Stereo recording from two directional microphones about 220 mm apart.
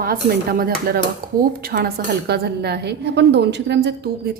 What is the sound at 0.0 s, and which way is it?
A woman's voice, 40° right (ahead or behind).